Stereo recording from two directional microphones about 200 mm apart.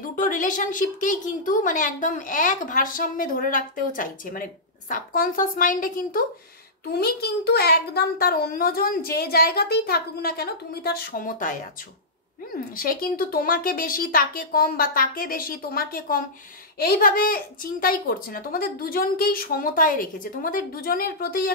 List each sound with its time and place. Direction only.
0.1 s a woman's voice: 40° left (ahead or behind)
12.7 s a woman's voice: 45° left (ahead or behind)